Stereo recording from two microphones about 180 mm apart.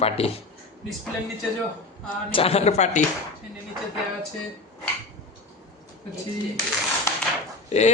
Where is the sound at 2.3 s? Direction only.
30° left (ahead or behind).